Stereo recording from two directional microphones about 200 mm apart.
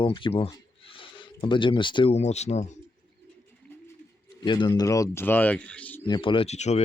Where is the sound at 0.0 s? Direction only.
25° left (ahead or behind).